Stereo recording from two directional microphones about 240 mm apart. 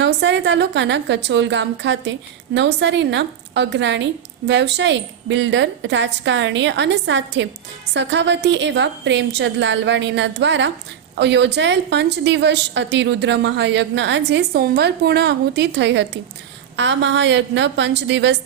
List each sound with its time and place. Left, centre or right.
0.0 s a woman's voice: right